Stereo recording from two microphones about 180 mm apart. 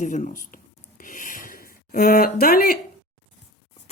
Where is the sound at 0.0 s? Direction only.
40° left (ahead or behind).